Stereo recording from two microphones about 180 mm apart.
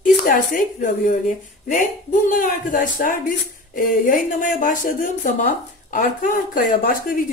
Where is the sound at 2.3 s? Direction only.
50° left (ahead or behind).